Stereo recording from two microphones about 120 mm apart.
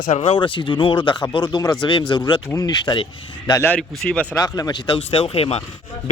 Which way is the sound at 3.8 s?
5° left (ahead or behind).